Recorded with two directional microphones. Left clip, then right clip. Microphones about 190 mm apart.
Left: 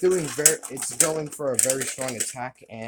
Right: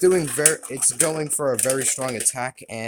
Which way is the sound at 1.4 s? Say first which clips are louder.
Right 4 dB; 45° right (ahead or behind).